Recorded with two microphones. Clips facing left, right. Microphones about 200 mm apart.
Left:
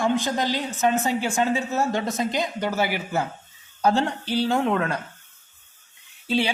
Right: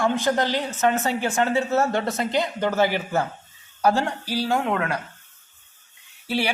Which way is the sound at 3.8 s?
20° left (ahead or behind).